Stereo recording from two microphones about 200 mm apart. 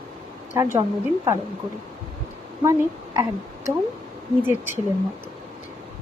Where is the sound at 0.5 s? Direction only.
15° right (ahead or behind).